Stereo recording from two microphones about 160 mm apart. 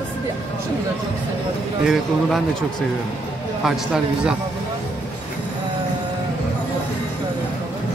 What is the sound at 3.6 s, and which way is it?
Speech, 5° right (ahead or behind).